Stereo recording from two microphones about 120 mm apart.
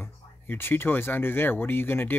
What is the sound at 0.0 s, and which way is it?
Speech, 20° left (ahead or behind).